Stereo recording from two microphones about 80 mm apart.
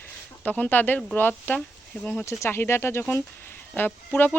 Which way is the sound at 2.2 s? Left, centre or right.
Left.